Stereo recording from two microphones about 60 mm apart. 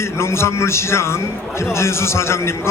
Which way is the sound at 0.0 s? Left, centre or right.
Left.